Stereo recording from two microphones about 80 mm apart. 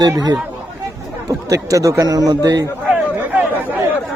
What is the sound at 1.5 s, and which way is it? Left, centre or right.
A man's voice, right.